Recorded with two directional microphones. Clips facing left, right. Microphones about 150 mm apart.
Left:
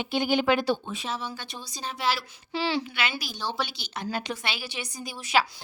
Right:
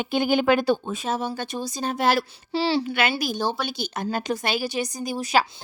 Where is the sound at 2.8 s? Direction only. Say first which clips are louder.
Right 8 dB; 50° right (ahead or behind).